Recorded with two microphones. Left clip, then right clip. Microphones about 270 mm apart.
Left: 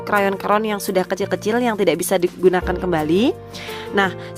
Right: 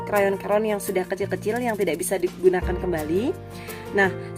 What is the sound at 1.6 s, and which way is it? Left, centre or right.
Speech, left.